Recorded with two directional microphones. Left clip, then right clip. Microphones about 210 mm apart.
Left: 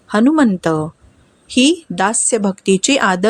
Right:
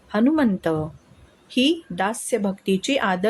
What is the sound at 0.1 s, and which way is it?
Speech, 25° left (ahead or behind).